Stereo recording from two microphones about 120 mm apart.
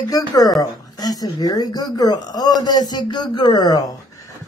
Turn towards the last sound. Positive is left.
turn(degrees=35)  # may be behind; listen again after turning